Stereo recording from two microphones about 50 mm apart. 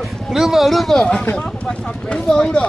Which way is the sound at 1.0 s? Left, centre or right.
Left.